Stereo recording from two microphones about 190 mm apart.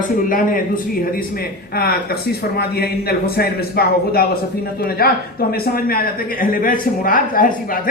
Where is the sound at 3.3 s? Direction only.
55° left (ahead or behind).